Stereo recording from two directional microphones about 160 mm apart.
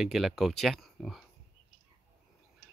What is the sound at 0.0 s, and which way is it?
Speech, centre (ahead or behind).